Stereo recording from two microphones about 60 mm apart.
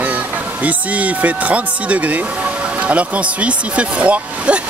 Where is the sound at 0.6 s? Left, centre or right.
Right.